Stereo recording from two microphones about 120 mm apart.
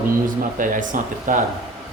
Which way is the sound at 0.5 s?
90° right.